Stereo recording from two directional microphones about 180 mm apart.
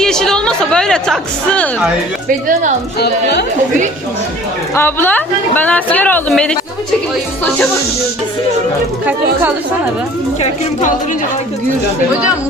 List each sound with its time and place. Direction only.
0.0 s a woman's voice: 5° left (ahead or behind)
3.0 s a woman's voice: 70° left (ahead or behind)
4.7 s speech: 10° left (ahead or behind)
10.4 s a woman's voice: 40° left (ahead or behind)